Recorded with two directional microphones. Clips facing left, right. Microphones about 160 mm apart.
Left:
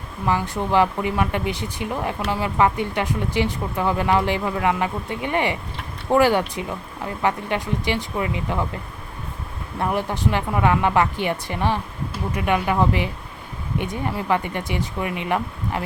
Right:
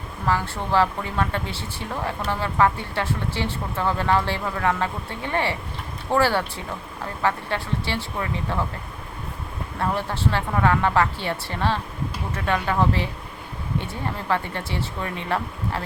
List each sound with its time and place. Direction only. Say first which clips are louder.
0.3 s speech: left 2 dB; 15° left (ahead or behind)
9.7 s speech: left 2 dB; 15° left (ahead or behind)